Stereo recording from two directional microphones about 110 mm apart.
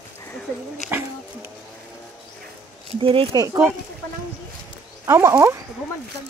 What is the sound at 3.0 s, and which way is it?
Speech, 55° right (ahead or behind).